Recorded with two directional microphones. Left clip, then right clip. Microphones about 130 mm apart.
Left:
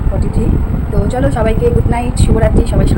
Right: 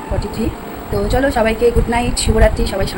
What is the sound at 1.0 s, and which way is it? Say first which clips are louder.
Speech: right 1 dB; 5° left (ahead or behind).